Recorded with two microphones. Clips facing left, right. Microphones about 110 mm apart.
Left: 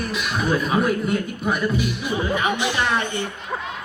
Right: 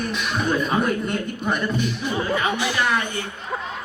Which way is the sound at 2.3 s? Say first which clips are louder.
Left 1 dB; 20° left (ahead or behind).